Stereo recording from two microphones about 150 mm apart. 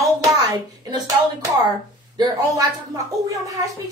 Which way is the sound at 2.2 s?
25° right (ahead or behind).